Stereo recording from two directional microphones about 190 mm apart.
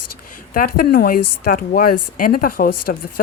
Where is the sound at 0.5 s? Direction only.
50° left (ahead or behind).